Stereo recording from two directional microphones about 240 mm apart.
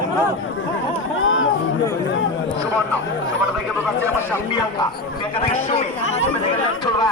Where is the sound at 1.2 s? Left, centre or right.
Left.